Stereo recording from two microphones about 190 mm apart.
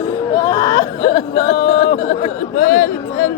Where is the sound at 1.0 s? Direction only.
35° left (ahead or behind).